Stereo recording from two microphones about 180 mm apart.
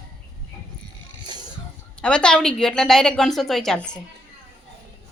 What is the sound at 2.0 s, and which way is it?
A woman's voice, 5° left (ahead or behind).